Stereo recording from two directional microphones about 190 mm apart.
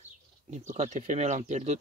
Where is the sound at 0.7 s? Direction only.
40° right (ahead or behind).